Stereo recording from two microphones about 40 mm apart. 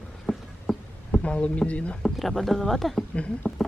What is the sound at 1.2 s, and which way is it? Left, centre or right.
Speech, left.